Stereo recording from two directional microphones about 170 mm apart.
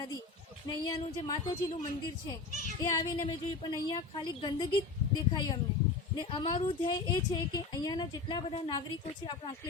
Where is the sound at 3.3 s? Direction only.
25° left (ahead or behind).